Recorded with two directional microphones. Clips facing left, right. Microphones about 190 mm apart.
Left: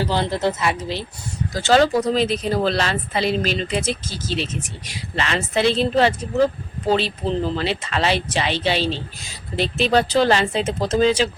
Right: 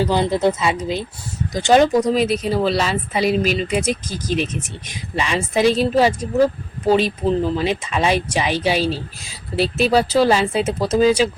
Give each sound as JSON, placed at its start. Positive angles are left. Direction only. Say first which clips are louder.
{"t": 0.1, "sound": "speech", "louder": "right 4 dB", "side_deg": -15}